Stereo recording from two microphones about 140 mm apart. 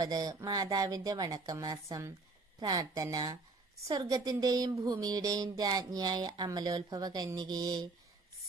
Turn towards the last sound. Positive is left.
turn(degrees=-30)  # may be behind; listen again after turning